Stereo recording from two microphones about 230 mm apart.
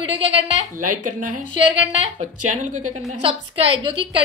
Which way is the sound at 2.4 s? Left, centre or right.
Right.